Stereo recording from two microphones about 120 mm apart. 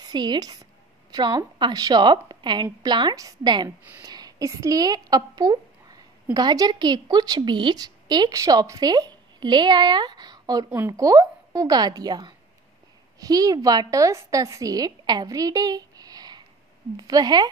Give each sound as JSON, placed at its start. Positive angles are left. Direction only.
{"t": 0.0, "sound": "a woman's voice", "side_deg": -35}